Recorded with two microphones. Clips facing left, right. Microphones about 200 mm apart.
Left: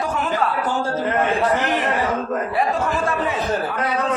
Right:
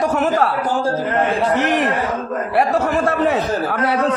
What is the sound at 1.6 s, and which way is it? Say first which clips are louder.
A man's voice: right 3 dB; 75° right (ahead or behind).